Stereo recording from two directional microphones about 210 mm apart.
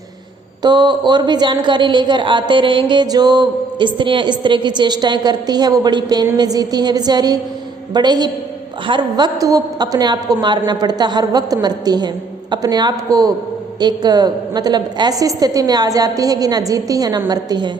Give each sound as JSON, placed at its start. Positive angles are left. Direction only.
{"t": 0.6, "sound": "a woman's voice", "side_deg": -20}